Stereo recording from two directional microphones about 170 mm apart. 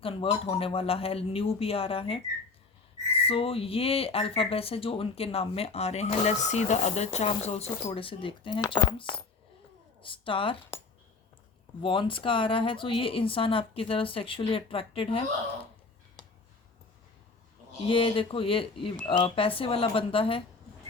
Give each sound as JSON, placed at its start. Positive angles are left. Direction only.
{"t": 0.0, "sound": "speech", "side_deg": 35}
{"t": 3.2, "sound": "speech", "side_deg": 35}
{"t": 11.8, "sound": "speech", "side_deg": 30}
{"t": 17.8, "sound": "speech", "side_deg": 30}